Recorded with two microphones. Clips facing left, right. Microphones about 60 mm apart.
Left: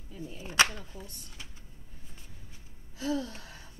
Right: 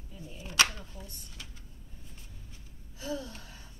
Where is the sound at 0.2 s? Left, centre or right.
Left.